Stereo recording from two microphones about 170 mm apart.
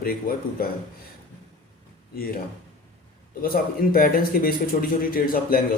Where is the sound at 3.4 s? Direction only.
60° left (ahead or behind).